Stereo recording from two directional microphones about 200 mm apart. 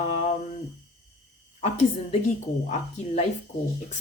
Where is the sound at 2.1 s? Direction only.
35° left (ahead or behind).